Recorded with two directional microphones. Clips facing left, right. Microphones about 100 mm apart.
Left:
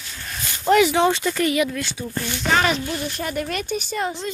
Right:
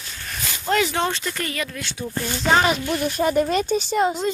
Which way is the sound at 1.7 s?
Centre (ahead or behind).